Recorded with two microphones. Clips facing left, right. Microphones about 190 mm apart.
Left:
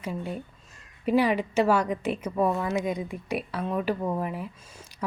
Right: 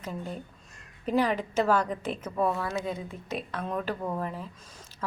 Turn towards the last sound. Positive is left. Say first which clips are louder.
# left 3 dB
turn(degrees=15)  # may be behind; listen again after turning